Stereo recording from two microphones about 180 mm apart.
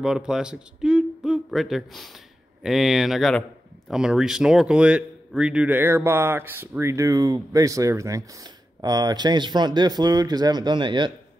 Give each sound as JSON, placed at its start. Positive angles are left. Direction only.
{"t": 0.0, "sound": "speech", "side_deg": -5}